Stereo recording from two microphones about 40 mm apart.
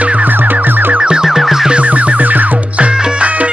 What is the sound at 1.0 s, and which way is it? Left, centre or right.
Music, right.